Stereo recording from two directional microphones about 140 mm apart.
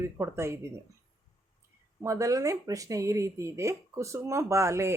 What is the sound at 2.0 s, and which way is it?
Speech, 20° right (ahead or behind).